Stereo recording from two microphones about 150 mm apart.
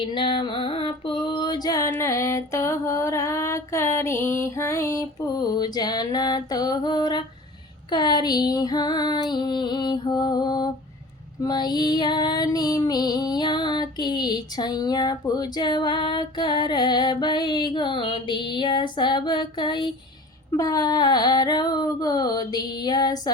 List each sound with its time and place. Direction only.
0.0 s female singing: 35° left (ahead or behind)